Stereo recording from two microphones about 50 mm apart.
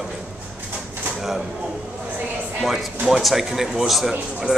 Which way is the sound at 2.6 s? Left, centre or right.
Centre.